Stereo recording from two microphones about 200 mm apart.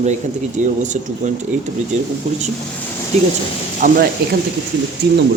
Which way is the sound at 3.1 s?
35° right (ahead or behind).